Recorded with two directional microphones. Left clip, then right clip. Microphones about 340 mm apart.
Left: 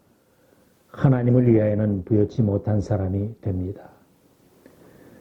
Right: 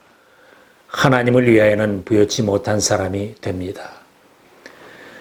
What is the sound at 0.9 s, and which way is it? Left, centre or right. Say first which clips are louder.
Speech: right 8 dB; centre.